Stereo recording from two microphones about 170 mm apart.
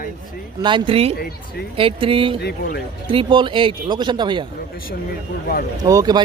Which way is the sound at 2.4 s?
70° left (ahead or behind).